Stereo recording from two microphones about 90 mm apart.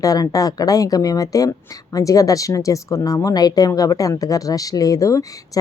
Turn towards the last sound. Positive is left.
turn(degrees=35)  # may be behind; listen again after turning